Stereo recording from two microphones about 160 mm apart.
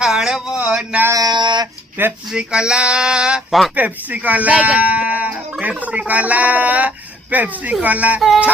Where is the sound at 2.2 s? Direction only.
5° right (ahead or behind).